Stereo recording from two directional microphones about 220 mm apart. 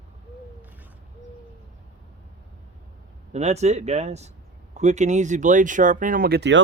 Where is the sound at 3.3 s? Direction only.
30° right (ahead or behind).